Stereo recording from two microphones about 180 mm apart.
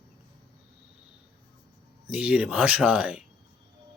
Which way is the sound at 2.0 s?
5° right (ahead or behind).